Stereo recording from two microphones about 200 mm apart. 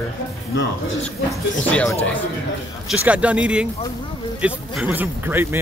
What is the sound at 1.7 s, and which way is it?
Speech, 5° left (ahead or behind).